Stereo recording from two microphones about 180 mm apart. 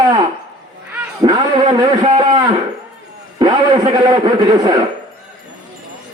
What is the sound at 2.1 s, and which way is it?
Speech, 40° right (ahead or behind).